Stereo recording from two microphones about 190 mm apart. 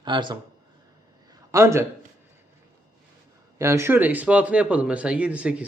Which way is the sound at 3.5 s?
15° right (ahead or behind).